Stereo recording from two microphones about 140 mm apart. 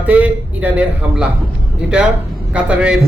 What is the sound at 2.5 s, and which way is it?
Speech, 10° right (ahead or behind).